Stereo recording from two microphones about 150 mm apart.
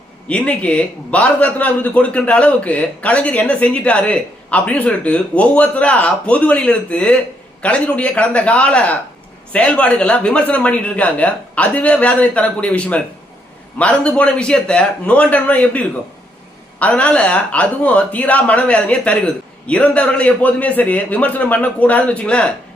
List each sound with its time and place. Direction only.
0.3 s a man's voice: 10° left (ahead or behind)